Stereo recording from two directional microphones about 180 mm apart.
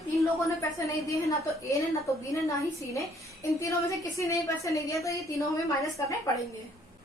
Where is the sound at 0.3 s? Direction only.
15° left (ahead or behind).